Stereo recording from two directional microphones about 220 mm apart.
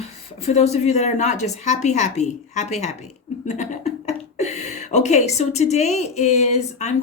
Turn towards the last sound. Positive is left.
turn(degrees=30)  # may be behind; listen again after turning